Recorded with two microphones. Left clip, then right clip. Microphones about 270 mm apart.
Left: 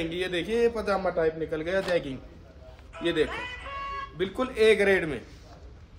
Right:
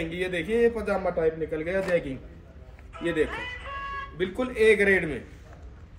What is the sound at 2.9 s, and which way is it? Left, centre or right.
Music, left.